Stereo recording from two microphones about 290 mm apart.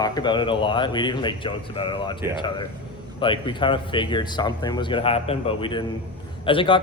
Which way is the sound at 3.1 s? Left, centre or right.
Centre.